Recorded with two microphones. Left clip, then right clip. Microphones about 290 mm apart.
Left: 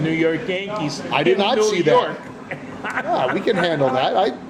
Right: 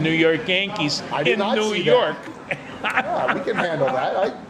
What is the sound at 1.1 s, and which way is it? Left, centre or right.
Speech, left.